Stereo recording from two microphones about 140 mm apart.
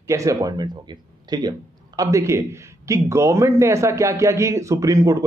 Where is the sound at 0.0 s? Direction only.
20° right (ahead or behind).